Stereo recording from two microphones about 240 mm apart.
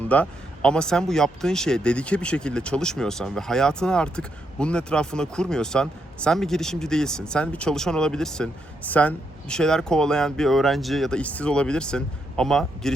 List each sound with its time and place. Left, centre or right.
0.1 s speech: centre